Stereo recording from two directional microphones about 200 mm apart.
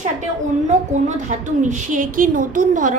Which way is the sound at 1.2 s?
40° right (ahead or behind).